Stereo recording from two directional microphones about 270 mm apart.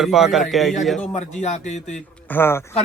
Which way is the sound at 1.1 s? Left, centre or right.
Left.